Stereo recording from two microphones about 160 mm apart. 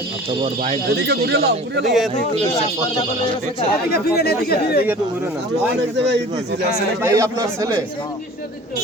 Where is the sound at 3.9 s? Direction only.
80° left.